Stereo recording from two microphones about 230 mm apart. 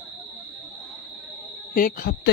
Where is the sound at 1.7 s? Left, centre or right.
Left.